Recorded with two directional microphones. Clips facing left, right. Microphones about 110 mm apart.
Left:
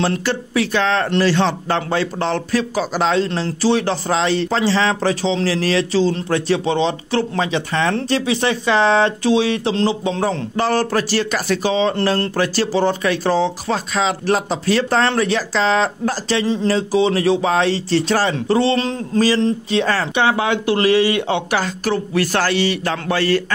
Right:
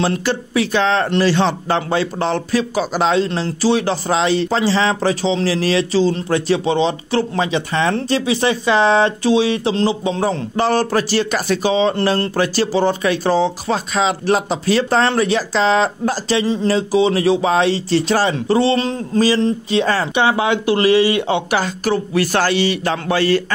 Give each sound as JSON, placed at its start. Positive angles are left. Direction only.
{"t": 0.0, "sound": "speech", "side_deg": -15}
{"t": 10.5, "sound": "speech", "side_deg": -20}